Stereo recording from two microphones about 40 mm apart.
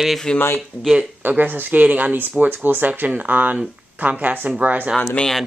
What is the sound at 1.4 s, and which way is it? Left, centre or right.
Speech, right.